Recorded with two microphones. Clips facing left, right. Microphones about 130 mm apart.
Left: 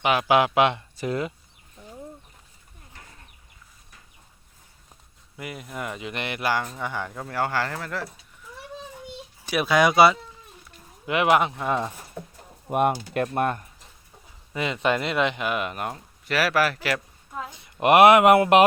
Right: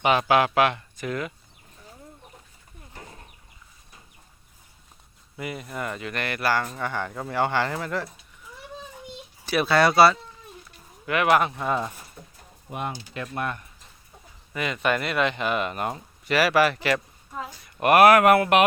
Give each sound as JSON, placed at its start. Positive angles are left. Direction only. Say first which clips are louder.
{"t": 0.0, "sound": "speech", "louder": "right 1 dB", "side_deg": 5}
{"t": 0.3, "sound": "speech", "louder": "left 1 dB", "side_deg": 15}
{"t": 5.4, "sound": "speech", "louder": "right 2 dB", "side_deg": 0}
{"t": 9.5, "sound": "speech", "louder": "even", "side_deg": 10}
{"t": 11.6, "sound": "speech", "louder": "left 1 dB", "side_deg": 0}
{"t": 12.6, "sound": "speech", "louder": "left 10 dB", "side_deg": 55}
{"t": 13.2, "sound": "speech", "louder": "left 4 dB", "side_deg": 45}
{"t": 14.5, "sound": "speech", "louder": "left 1 dB", "side_deg": 25}
{"t": 17.5, "sound": "speech", "louder": "left 1 dB", "side_deg": 20}